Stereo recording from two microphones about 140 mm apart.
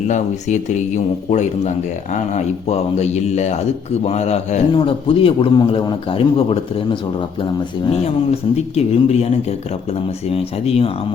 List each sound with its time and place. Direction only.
0.1 s a man's voice: 60° left (ahead or behind)
4.7 s a man's voice: 40° left (ahead or behind)
7.9 s speech: 45° left (ahead or behind)